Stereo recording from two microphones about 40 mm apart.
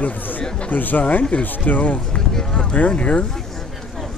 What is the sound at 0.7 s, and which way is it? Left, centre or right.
Speech, left.